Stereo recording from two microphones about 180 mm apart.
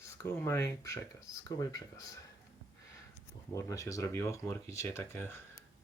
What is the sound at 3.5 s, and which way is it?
Speech, 20° left (ahead or behind).